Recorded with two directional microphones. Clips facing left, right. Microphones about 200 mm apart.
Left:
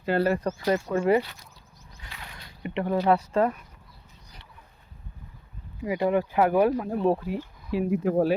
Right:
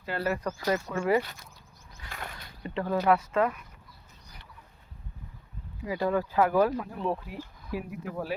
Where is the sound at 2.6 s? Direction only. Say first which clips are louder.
Left 2 dB; 20° left (ahead or behind).